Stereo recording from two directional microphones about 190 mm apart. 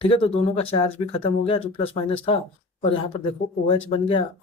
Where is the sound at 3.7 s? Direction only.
30° left (ahead or behind).